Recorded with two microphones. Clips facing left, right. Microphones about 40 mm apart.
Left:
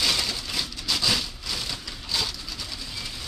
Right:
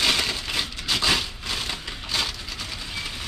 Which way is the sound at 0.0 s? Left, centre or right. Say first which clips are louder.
Right 3 dB; right.